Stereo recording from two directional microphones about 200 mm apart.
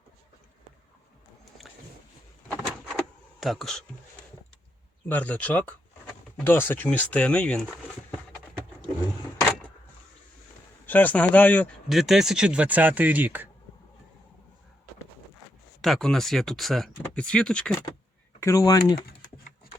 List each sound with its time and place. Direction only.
2.5 s a sound: centre (ahead or behind)
3.4 s speech: centre (ahead or behind)
5.0 s speech: 5° left (ahead or behind)
10.8 s speech: 10° left (ahead or behind); by 13.5 s 10° right (ahead or behind)
15.8 s speech: centre (ahead or behind)
18.3 s speech: 15° left (ahead or behind)